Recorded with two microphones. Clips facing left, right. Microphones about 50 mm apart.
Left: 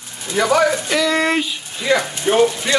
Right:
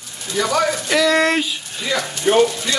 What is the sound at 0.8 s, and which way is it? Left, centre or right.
Speech, centre.